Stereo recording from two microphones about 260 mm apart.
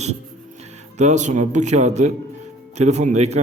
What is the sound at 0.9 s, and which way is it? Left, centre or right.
A man's voice, right.